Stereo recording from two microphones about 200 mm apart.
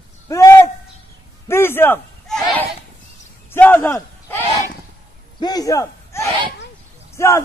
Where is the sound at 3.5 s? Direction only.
10° left (ahead or behind).